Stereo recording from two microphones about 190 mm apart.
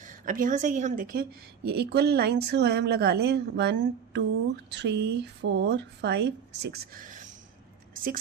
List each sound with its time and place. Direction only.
0.0 s speech: 45° right (ahead or behind)